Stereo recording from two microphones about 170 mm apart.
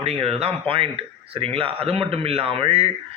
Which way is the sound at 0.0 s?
35° right (ahead or behind).